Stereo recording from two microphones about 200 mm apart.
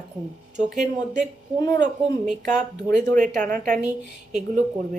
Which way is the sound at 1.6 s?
15° left (ahead or behind).